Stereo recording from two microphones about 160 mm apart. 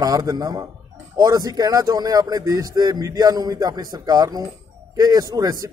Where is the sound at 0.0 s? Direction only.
25° right (ahead or behind).